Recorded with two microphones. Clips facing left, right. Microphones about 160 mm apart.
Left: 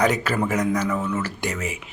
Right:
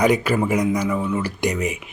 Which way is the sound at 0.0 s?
10° right (ahead or behind).